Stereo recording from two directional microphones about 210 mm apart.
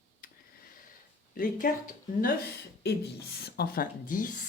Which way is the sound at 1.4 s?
40° left (ahead or behind).